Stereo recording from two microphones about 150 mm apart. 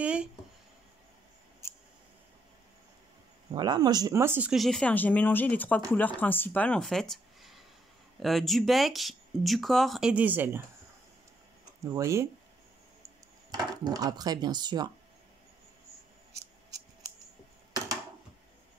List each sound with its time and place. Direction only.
0.0 s a sound: 5° right (ahead or behind)
3.5 s speech: 30° right (ahead or behind)
4.5 s speech: centre (ahead or behind)
11.8 s speech: 20° right (ahead or behind)
13.5 s speech: 25° right (ahead or behind)